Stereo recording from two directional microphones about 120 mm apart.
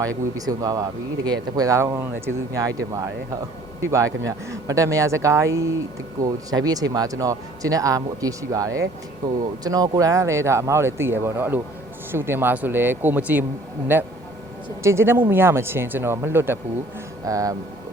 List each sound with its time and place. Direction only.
0.0 s speech: 30° right (ahead or behind)
17.2 s speech: 30° right (ahead or behind)